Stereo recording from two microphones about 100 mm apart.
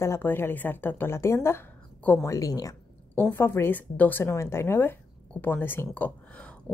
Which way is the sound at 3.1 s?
20° left (ahead or behind).